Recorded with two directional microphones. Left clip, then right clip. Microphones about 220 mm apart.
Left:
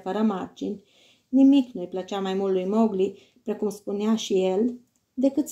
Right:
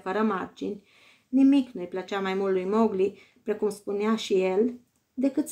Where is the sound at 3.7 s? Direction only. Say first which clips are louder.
Left 1 dB; 30° right (ahead or behind).